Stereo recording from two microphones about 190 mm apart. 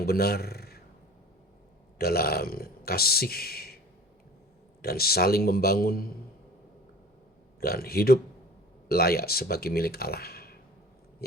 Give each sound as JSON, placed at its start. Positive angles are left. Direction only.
{"t": 0.0, "sound": "a man's voice", "side_deg": 55}
{"t": 2.0, "sound": "speech", "side_deg": 55}
{"t": 4.8, "sound": "speech", "side_deg": 55}
{"t": 7.6, "sound": "speech", "side_deg": 55}
{"t": 11.2, "sound": "a sound", "side_deg": 55}